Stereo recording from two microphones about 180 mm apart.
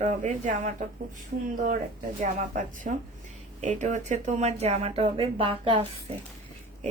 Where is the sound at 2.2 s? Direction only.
45° right (ahead or behind); by 5.8 s 30° right (ahead or behind).